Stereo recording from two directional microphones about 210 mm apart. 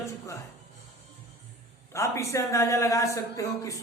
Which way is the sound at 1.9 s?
15° left (ahead or behind).